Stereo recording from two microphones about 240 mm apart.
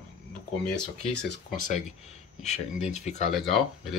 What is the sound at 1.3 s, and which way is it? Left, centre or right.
Speech, left.